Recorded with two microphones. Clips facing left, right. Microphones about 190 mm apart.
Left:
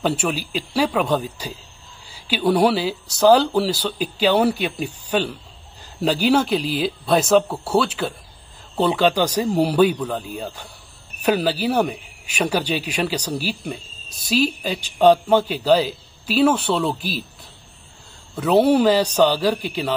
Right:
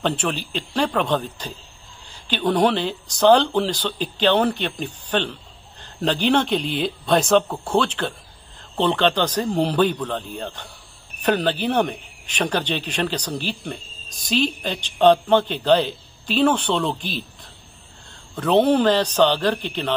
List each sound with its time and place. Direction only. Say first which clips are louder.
0.0 s speech: left 2 dB; 10° left (ahead or behind)